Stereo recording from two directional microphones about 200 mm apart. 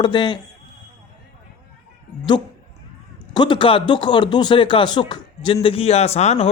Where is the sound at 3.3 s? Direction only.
25° left (ahead or behind).